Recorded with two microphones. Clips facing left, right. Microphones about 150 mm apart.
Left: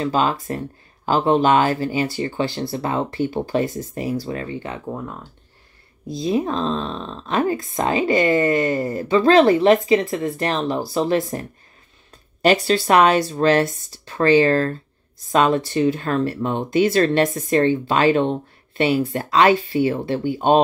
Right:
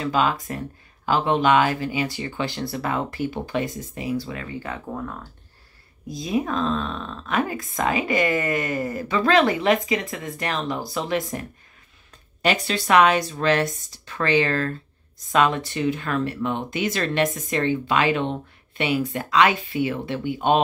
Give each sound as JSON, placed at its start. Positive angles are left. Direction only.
{"t": 0.0, "sound": "speech", "side_deg": 35}
{"t": 4.6, "sound": "speech", "side_deg": 20}